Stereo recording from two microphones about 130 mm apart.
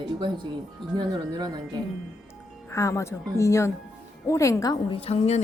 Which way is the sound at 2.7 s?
25° left (ahead or behind).